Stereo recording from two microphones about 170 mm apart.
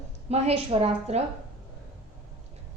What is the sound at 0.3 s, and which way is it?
Speech, 40° right (ahead or behind).